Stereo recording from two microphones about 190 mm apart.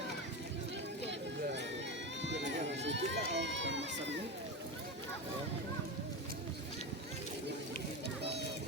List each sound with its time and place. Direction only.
2.6 s run: 70° right (ahead or behind)